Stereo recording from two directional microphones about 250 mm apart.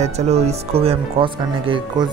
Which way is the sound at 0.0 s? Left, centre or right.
Right.